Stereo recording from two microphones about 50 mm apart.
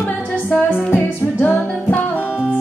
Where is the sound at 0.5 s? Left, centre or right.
Left.